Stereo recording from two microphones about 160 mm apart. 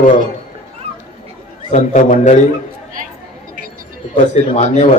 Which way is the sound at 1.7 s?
50° left (ahead or behind).